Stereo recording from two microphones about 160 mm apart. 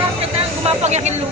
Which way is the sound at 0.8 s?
45° right (ahead or behind).